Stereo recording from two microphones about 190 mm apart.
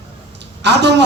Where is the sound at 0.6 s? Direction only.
65° right (ahead or behind).